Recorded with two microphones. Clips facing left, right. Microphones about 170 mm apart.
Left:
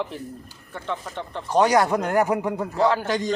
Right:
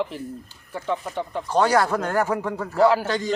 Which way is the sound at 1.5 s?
15° left (ahead or behind).